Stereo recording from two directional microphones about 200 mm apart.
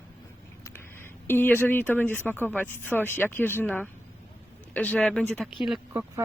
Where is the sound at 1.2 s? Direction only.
10° left (ahead or behind).